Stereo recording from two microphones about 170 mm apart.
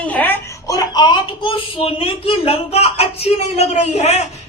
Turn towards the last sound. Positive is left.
turn(degrees=40)  # may be behind; listen again after turning